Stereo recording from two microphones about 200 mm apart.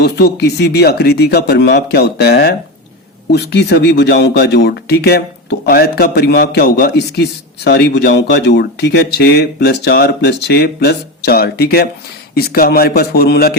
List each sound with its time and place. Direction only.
0.0 s a man's voice: 55° left (ahead or behind)